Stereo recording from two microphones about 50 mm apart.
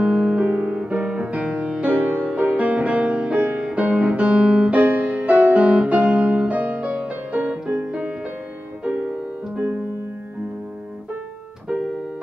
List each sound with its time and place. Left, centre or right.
0.0 s music: centre
7.3 s music: right